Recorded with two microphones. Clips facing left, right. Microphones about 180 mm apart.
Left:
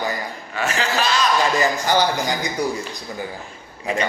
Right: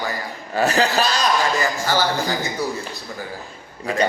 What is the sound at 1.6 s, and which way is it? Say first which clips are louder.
A man's voice: left 2 dB; 20° left (ahead or behind).